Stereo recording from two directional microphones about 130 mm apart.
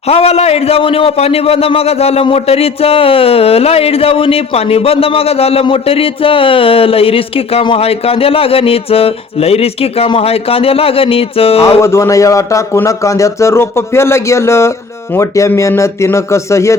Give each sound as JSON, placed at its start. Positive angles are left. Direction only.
{"t": 0.1, "sound": "a man's voice", "side_deg": 50}
{"t": 11.8, "sound": "a man's voice", "side_deg": 20}